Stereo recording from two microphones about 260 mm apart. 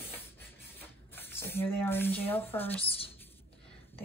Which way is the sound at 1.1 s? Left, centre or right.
Centre.